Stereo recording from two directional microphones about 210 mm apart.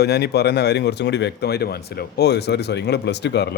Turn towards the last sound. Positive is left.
turn(degrees=55)  # may be behind; listen again after turning